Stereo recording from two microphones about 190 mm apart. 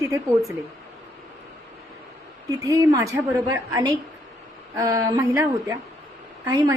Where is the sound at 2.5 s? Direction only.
15° right (ahead or behind).